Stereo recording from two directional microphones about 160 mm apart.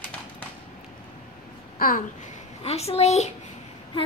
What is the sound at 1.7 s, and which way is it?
Babbling, 65° left (ahead or behind).